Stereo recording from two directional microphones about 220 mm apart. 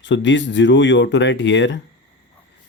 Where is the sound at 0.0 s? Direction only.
55° left (ahead or behind).